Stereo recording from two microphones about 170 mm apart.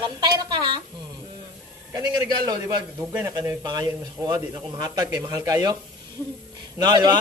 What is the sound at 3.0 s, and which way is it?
Speech, 10° right (ahead or behind).